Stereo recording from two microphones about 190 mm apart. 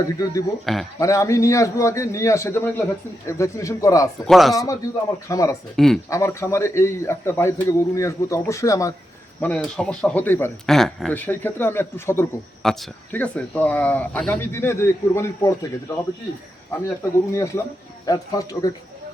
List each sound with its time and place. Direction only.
0.0 s speech: 20° left (ahead or behind)
0.6 s speech: centre (ahead or behind)
0.9 s speech: 15° left (ahead or behind)
4.3 s speech: centre (ahead or behind)
4.5 s speech: 20° left (ahead or behind)
5.7 s speech: centre (ahead or behind)
6.1 s speech: 15° left (ahead or behind)
9.7 s speech: 5° left (ahead or behind)